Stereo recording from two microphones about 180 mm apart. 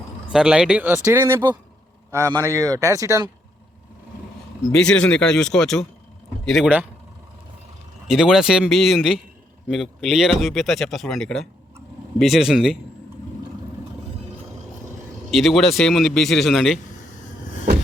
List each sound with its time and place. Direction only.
0.3 s a man's voice: 5° right (ahead or behind)
4.7 s speech: 5° left (ahead or behind)
8.0 s speech: 5° right (ahead or behind)
15.3 s speech: centre (ahead or behind)